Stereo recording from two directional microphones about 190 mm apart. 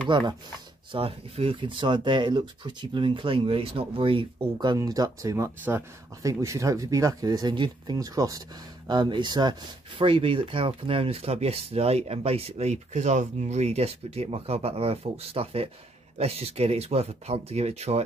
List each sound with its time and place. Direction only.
0.1 s speech: 25° right (ahead or behind)